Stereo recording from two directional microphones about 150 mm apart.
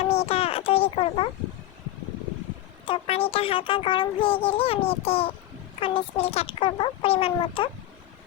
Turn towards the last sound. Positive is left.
turn(degrees=40)  # may be behind; listen again after turning